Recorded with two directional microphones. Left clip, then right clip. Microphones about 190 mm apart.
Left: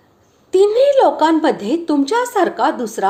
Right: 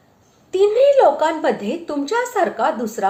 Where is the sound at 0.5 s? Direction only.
30° left (ahead or behind).